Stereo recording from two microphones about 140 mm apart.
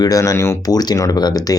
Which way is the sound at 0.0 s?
25° left (ahead or behind).